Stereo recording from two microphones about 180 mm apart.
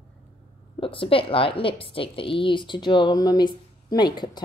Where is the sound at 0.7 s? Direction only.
30° left (ahead or behind).